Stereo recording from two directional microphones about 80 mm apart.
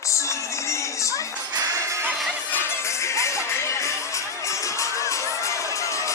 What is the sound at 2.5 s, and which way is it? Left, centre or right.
Music, left.